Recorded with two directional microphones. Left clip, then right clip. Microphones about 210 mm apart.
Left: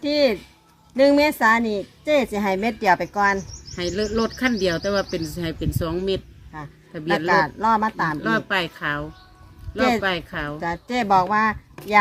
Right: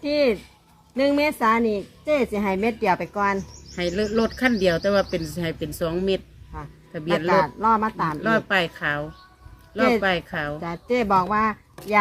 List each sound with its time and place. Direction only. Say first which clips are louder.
0.0 s a woman's voice: left 1 dB; 45° left (ahead or behind)
3.8 s speech: even; centre (ahead or behind)
7.3 s a woman's voice: left 1 dB; 45° left (ahead or behind)
8.2 s speech: right 4 dB; centre (ahead or behind)
10.6 s a woman's voice: even; 45° left (ahead or behind)